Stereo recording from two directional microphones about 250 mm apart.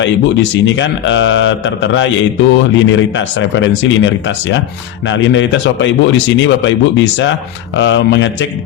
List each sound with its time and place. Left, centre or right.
0.0 s a man's voice: left